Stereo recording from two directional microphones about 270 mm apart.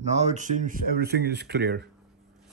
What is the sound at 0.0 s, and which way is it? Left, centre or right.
Speech, right.